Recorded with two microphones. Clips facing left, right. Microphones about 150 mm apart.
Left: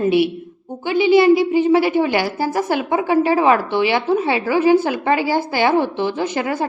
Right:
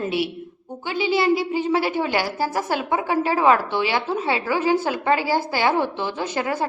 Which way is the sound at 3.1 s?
15° left (ahead or behind).